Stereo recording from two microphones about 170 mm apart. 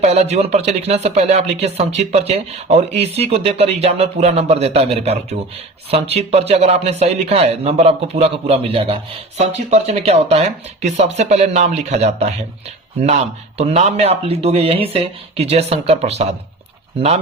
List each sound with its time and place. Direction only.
0.0 s speech: 40° right (ahead or behind)
13.6 s speech: 40° right (ahead or behind)